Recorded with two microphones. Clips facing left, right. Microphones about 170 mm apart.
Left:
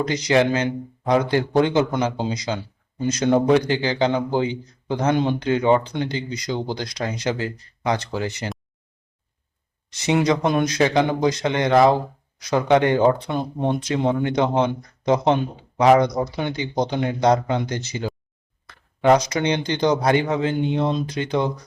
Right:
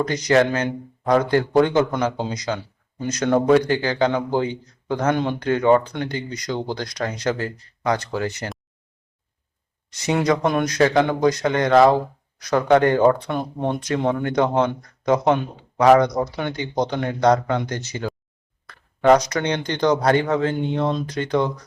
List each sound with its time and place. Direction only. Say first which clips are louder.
0.0 s a man's voice: right 1 dB; 25° left (ahead or behind)
10.0 s a man's voice: even; 20° left (ahead or behind)
19.2 s a man's voice: left 1 dB; 25° left (ahead or behind)